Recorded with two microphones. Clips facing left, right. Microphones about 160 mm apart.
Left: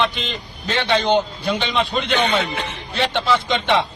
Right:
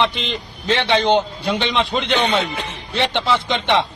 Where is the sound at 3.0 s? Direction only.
20° right (ahead or behind).